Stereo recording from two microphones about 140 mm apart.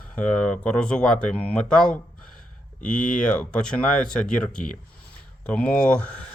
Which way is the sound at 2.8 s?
65° left (ahead or behind).